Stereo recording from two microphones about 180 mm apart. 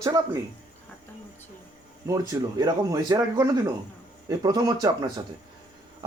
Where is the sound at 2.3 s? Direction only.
20° right (ahead or behind).